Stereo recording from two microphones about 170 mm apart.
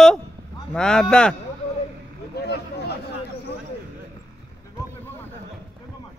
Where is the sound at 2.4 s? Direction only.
75° left (ahead or behind).